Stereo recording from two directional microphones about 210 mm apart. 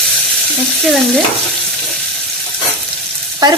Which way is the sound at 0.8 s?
Centre (ahead or behind).